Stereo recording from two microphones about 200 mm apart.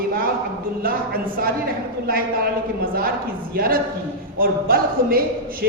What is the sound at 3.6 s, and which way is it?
A woman's voice, 45° right (ahead or behind).